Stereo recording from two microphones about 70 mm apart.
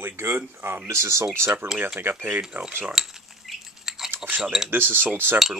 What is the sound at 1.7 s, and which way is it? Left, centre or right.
Speech, right.